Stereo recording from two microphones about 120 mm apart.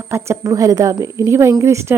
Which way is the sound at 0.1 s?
25° right (ahead or behind).